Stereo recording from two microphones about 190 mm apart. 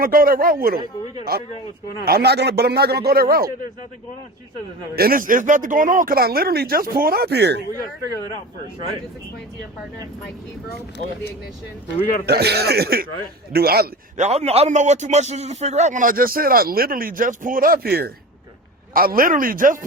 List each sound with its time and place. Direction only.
0.0 s a man's voice: 50° right (ahead or behind)
4.9 s a man's voice: 50° right (ahead or behind)
12.2 s a man's voice: 60° right (ahead or behind)
14.2 s a man's voice: 35° right (ahead or behind)